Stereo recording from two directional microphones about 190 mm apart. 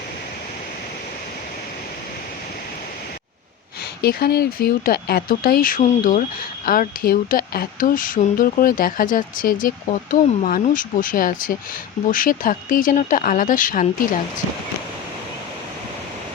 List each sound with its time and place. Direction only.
4.0 s speech: 55° left (ahead or behind)